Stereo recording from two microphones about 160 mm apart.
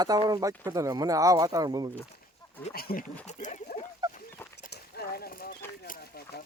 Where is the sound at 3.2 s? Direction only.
50° left (ahead or behind).